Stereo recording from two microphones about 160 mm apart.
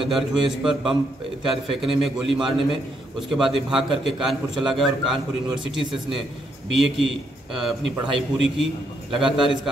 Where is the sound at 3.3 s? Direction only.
Centre (ahead or behind).